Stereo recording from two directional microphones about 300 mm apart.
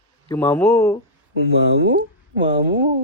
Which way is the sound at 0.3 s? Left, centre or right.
Centre.